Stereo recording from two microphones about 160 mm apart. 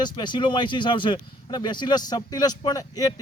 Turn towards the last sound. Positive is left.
turn(degrees=25)  # may be behind; listen again after turning